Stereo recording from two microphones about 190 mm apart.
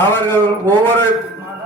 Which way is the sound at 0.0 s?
10° left (ahead or behind).